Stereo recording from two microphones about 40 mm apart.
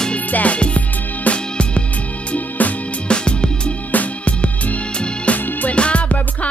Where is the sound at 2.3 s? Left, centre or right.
Left.